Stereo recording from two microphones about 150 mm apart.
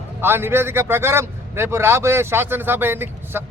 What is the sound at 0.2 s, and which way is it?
Speech, 15° right (ahead or behind).